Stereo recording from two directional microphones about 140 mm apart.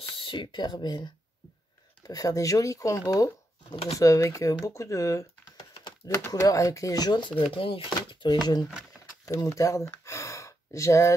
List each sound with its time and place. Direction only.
0.2 s speech: 35° left (ahead or behind)
3.7 s speech: 40° left (ahead or behind)
4.0 s speech: 20° left (ahead or behind)
9.2 s a sound: 25° left (ahead or behind)